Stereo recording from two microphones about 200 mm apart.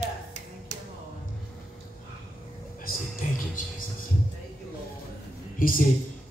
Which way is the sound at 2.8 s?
40° left (ahead or behind).